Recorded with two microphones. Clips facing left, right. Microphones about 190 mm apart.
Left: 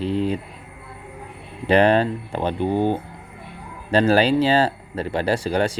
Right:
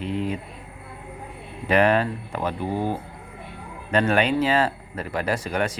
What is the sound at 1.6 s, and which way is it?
Speech, 30° left (ahead or behind).